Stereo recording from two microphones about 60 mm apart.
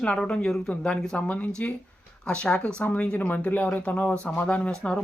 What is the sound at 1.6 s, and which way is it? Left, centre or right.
Speech, left.